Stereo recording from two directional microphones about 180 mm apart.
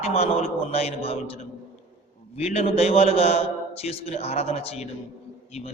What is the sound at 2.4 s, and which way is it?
A man's voice, 35° left (ahead or behind).